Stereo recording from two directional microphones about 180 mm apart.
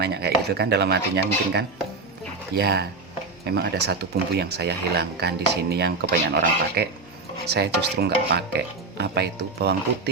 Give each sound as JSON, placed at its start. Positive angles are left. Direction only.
{"t": 0.0, "sound": "speech", "side_deg": -65}